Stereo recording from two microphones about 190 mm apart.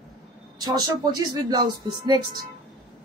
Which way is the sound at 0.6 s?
20° right (ahead or behind).